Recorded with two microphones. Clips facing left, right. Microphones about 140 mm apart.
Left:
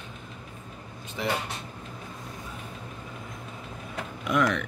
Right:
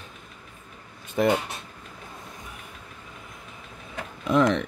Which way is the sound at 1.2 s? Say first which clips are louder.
Right 9 dB; 50° right (ahead or behind).